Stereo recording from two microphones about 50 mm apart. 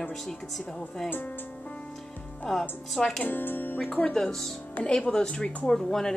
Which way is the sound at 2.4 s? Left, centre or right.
Centre.